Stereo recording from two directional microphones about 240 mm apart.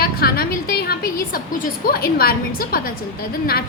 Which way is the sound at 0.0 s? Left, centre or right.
Left.